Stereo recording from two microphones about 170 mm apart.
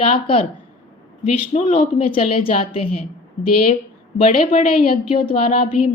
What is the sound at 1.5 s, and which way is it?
Speech, 35° left (ahead or behind).